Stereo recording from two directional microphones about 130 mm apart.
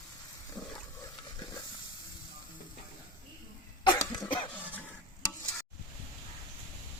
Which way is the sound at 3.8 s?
30° left (ahead or behind).